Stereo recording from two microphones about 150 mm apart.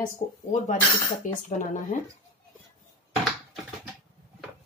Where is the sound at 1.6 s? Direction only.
55° left (ahead or behind).